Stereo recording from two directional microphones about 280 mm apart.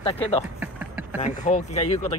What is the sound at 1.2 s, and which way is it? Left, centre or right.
Speech, left.